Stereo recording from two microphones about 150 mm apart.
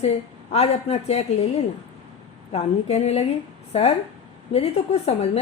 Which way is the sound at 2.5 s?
45° left (ahead or behind).